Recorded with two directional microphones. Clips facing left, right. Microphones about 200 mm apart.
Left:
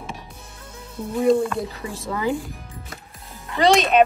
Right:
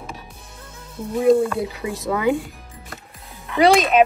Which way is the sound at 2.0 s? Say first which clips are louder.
Right 4 dB; 20° right (ahead or behind).